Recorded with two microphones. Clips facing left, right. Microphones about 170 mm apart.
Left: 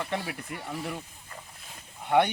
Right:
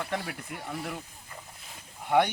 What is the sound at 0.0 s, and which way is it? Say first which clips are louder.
Speech: left 1 dB; 5° left (ahead or behind).